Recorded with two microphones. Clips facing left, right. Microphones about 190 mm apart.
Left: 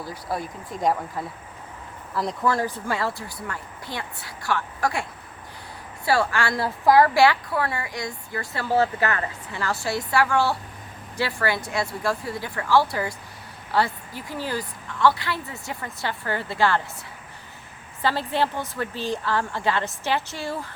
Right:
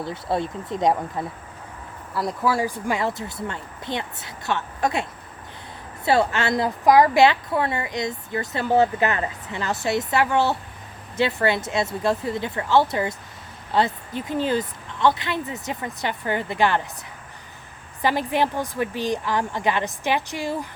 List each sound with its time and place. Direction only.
0.0 s a woman's voice: 25° right (ahead or behind)
2.1 s a woman's voice: 5° right (ahead or behind); by 5.0 s 20° right (ahead or behind)
6.1 s a woman's voice: 20° right (ahead or behind)
18.0 s a woman's voice: 15° right (ahead or behind)